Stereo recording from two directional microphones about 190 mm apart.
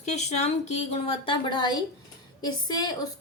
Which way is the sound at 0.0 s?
35° left (ahead or behind).